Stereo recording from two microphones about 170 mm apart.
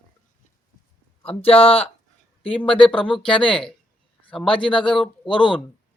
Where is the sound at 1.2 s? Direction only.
35° left (ahead or behind).